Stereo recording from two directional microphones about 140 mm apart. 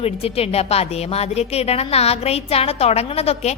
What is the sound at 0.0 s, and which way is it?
A woman's voice, 45° left (ahead or behind).